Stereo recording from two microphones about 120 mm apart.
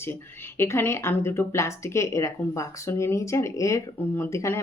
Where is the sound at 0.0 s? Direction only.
20° left (ahead or behind).